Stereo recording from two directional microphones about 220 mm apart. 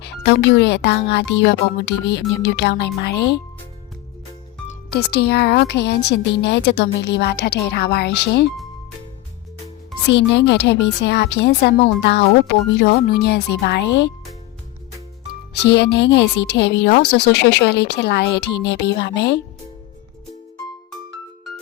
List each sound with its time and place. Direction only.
0.0 s speech: 50° left (ahead or behind)
5.1 s speech: 50° left (ahead or behind)
10.1 s speech: 55° left (ahead or behind)
15.3 s speech: 50° left (ahead or behind)